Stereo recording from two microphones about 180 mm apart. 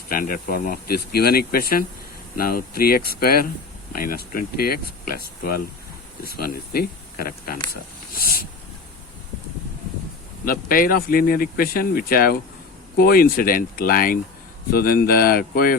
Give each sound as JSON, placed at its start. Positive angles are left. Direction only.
{"t": 0.1, "sound": "speech", "side_deg": 50}
{"t": 10.4, "sound": "speech", "side_deg": 55}